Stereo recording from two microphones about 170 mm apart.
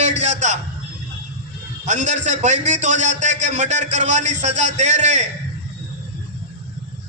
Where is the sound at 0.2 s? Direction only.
45° right (ahead or behind).